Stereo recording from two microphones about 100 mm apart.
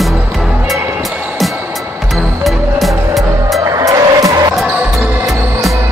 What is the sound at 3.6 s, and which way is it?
Music, 35° right (ahead or behind).